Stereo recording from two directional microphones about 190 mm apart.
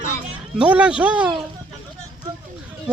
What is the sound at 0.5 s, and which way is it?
Speech, 5° right (ahead or behind).